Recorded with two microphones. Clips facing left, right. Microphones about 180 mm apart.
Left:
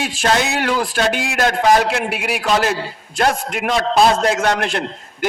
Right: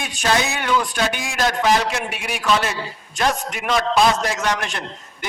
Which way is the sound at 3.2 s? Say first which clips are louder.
Left 4 dB; 55° left (ahead or behind).